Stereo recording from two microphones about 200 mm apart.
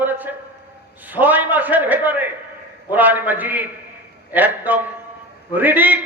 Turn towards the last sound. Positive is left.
turn(degrees=-10)  # may be behind; listen again after turning